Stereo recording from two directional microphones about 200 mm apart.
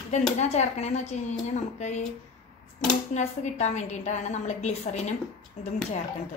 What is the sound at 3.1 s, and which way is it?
A woman's voice, 35° left (ahead or behind).